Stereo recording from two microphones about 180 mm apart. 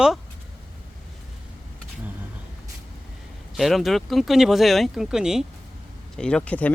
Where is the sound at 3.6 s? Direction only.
Centre (ahead or behind).